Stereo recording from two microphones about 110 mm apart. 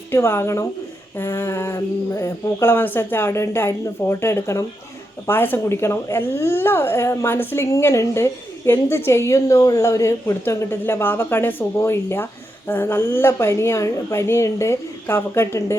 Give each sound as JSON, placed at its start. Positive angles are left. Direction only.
{"t": 0.1, "sound": "speech", "side_deg": 20}